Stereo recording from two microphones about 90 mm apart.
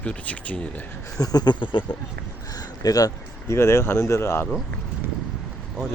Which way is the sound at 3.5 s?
30° left (ahead or behind).